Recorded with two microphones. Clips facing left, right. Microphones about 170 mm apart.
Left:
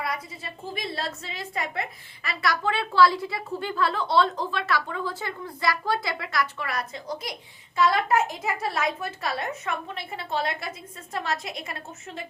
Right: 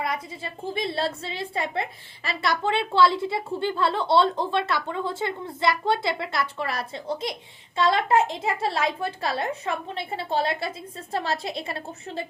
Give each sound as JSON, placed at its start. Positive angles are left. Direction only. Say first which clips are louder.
{"t": 0.0, "sound": "a woman's voice", "louder": "right 3 dB", "side_deg": -25}